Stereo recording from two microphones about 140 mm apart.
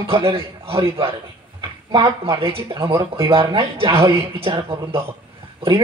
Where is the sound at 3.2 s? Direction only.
40° right (ahead or behind).